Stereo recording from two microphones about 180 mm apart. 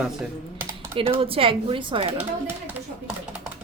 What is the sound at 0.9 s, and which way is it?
Speech, 30° right (ahead or behind).